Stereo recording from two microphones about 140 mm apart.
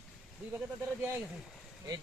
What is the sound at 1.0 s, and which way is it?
Speech, 10° right (ahead or behind).